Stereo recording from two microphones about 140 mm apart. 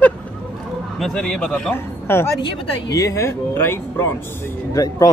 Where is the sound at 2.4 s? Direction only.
25° left (ahead or behind).